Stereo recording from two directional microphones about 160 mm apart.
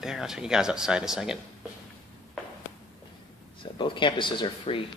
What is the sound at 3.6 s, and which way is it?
Speech, 30° left (ahead or behind).